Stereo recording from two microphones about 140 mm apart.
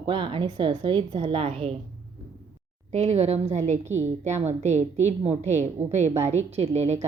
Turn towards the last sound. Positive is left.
turn(degrees=-50)  # may be behind; listen again after turning